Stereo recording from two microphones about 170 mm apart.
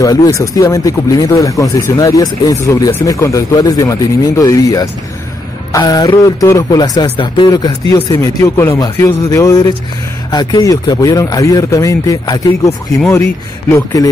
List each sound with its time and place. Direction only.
0.0 s speech: 20° left (ahead or behind)